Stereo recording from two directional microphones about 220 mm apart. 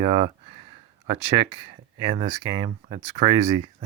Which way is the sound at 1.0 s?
25° right (ahead or behind).